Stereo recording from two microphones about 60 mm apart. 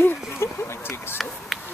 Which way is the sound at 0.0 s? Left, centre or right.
Left.